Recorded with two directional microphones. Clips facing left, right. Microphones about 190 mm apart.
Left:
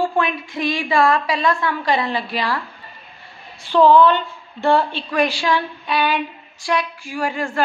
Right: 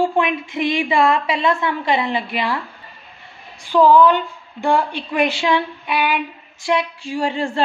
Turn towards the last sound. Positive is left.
turn(degrees=-25)  # may be behind; listen again after turning